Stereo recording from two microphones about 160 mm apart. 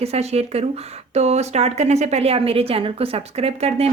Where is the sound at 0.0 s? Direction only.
40° right (ahead or behind).